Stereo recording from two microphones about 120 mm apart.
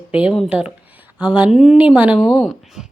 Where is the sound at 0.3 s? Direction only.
5° right (ahead or behind).